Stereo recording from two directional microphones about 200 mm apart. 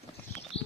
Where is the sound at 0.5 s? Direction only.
30° left (ahead or behind).